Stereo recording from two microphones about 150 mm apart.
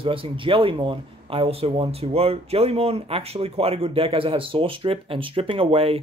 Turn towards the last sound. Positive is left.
turn(degrees=-40)  # may be behind; listen again after turning